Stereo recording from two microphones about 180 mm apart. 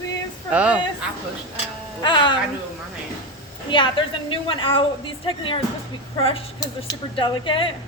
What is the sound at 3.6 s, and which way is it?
Speech, 25° left (ahead or behind).